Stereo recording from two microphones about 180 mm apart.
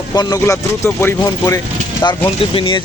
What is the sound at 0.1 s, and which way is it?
Speech, 20° left (ahead or behind).